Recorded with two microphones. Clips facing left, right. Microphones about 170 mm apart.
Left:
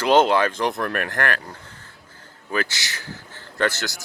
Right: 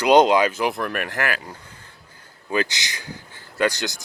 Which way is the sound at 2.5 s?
20° right (ahead or behind).